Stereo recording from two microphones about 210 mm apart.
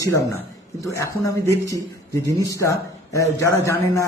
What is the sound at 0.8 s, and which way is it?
A man's voice, 15° left (ahead or behind).